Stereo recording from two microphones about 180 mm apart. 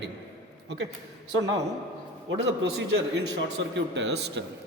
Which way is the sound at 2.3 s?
75° right (ahead or behind).